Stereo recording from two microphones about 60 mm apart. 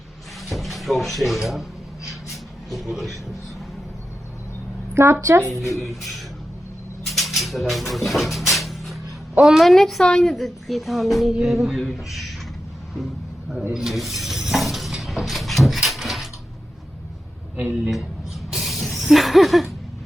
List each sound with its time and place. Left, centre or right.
0.4 s speech: centre
2.3 s a sound: centre
5.2 s speech: right
5.7 s speech: centre
7.1 s cupboard open or close: centre
9.6 s speech: centre
13.7 s a sound: centre
17.6 s a man's voice: right
18.5 s music: centre